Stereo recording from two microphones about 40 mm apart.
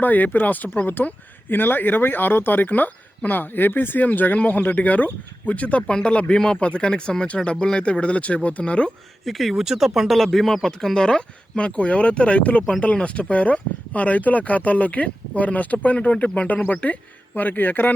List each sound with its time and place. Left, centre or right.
0.0 s speech: left
5.9 s speech: left
6.6 s speech: left
9.2 s speech: centre
9.6 s speech: centre
10.2 s speech: centre
11.5 s speech: left